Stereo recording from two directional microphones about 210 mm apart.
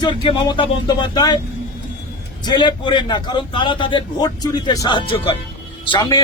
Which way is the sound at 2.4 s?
20° left (ahead or behind).